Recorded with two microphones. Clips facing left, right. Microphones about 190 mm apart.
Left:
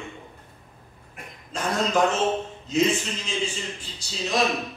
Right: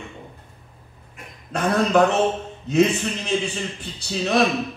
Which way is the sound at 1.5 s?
60° right (ahead or behind).